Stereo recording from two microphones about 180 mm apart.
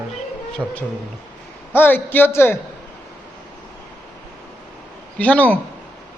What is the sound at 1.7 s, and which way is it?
Speech, 10° left (ahead or behind).